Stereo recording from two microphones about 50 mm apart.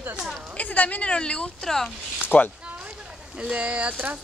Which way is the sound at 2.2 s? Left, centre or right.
Left.